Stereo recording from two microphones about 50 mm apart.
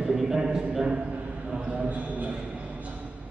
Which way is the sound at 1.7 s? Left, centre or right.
Right.